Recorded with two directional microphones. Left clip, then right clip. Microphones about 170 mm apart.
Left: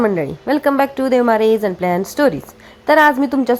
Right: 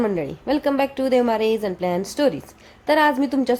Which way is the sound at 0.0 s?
15° left (ahead or behind).